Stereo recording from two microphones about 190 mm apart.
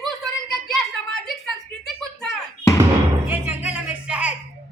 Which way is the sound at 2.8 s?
10° right (ahead or behind).